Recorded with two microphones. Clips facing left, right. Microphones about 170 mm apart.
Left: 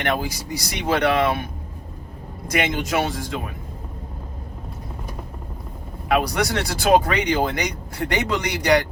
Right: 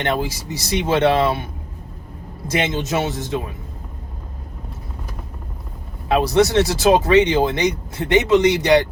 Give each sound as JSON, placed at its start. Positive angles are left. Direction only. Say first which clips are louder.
{"t": 0.0, "sound": "speech", "louder": "right 2 dB", "side_deg": -25}
{"t": 2.5, "sound": "speech", "louder": "right 2 dB", "side_deg": -25}
{"t": 6.1, "sound": "speech", "louder": "right 5 dB", "side_deg": -25}